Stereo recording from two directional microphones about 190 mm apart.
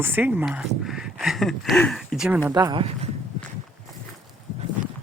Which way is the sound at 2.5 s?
20° right (ahead or behind).